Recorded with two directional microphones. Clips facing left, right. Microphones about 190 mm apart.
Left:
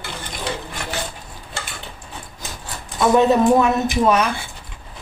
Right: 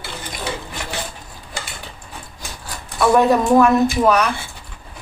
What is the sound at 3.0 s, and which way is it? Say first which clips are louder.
Speech: even; 20° left (ahead or behind).